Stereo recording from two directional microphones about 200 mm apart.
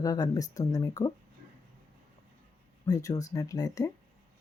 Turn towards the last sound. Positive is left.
turn(degrees=15)  # may be behind; listen again after turning